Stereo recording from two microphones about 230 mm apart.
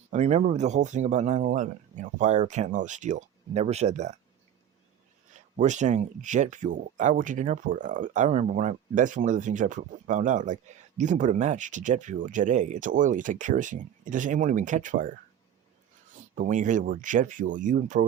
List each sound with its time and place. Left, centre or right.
0.1 s speech: right
5.3 s speech: right
16.3 s speech: right